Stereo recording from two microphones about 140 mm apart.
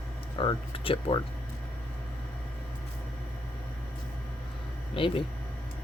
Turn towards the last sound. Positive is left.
turn(degrees=40)  # may be behind; listen again after turning